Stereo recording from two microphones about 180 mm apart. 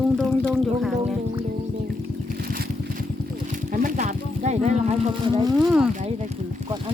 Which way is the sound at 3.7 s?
45° right (ahead or behind).